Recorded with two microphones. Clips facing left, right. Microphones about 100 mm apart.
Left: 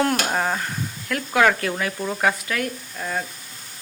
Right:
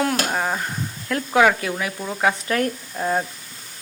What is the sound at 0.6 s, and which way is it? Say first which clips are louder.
Speech: right 1 dB; 25° right (ahead or behind).